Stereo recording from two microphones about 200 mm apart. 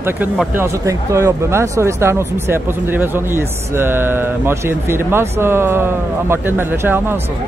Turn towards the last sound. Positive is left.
turn(degrees=-10)  # may be behind; listen again after turning